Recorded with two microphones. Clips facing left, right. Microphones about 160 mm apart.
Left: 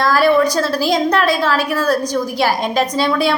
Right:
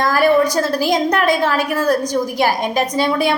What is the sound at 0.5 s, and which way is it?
A woman's voice, 15° right (ahead or behind).